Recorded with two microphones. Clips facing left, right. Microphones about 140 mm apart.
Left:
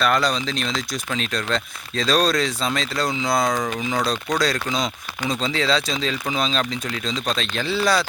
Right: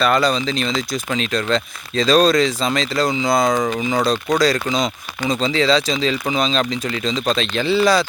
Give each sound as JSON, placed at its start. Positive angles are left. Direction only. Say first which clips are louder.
{"t": 0.0, "sound": "speech", "louder": "right 4 dB", "side_deg": 0}